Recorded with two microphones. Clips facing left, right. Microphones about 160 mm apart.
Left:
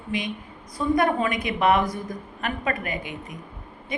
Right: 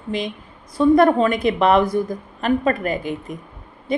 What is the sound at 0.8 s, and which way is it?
A woman's voice, 30° right (ahead or behind).